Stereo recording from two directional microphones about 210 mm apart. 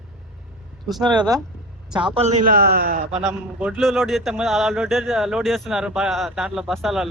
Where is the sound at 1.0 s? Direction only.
20° right (ahead or behind); by 3.0 s 45° right (ahead or behind).